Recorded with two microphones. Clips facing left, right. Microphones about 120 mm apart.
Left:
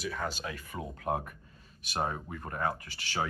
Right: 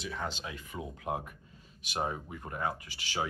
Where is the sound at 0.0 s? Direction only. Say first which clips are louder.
Left 2 dB; 20° right (ahead or behind).